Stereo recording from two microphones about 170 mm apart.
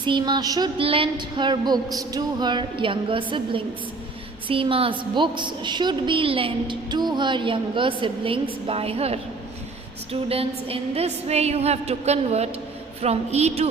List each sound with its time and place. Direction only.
0.0 s a woman's voice: 25° right (ahead or behind)